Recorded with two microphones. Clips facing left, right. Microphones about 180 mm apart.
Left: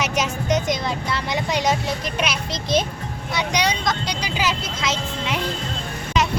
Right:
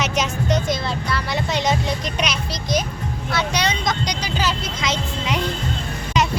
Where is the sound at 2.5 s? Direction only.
25° left (ahead or behind).